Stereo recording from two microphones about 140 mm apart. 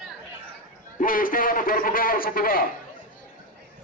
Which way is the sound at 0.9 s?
85° left.